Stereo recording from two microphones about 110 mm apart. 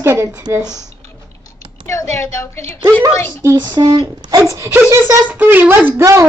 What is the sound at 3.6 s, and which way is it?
Speech, 40° right (ahead or behind).